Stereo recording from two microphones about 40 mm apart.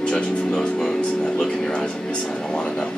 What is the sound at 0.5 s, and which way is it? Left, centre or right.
Speech, centre.